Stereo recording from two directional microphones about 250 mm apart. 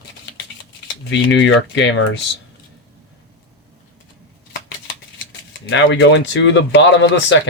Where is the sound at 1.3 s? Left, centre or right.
Left.